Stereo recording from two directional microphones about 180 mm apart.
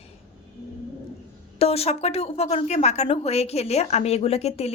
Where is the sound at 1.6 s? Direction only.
35° left (ahead or behind).